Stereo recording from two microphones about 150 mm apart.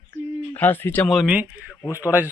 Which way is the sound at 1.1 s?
5° right (ahead or behind).